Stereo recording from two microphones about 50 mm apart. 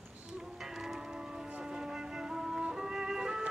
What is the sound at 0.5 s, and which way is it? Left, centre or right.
Church bell, centre.